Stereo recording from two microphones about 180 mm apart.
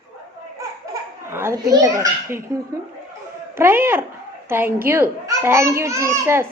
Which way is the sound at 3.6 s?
10° right (ahead or behind).